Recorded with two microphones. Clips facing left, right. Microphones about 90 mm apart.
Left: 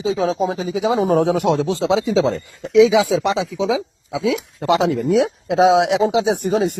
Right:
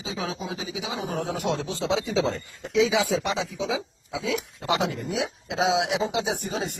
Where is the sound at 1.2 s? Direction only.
80° left.